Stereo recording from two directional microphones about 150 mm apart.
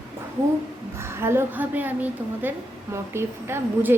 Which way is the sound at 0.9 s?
15° right (ahead or behind).